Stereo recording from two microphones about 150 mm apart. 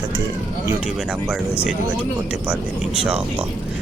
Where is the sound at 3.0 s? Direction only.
5° right (ahead or behind).